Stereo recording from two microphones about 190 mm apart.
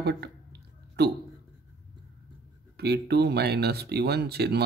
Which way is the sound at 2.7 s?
55° right (ahead or behind).